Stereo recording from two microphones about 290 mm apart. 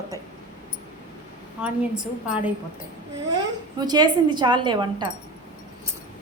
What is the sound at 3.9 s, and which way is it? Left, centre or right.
A woman's voice, centre.